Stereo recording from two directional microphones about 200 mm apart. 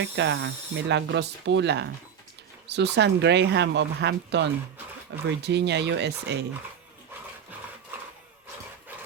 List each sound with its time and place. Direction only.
0.0 s speech: 60° right (ahead or behind)